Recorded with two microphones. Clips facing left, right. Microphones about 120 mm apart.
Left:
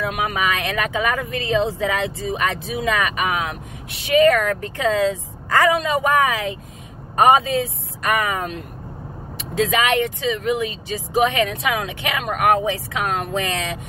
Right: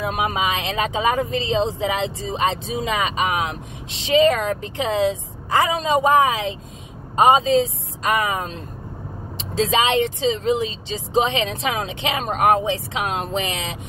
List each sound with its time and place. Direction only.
0.0 s speech: 20° right (ahead or behind)
7.5 s speech: 25° right (ahead or behind)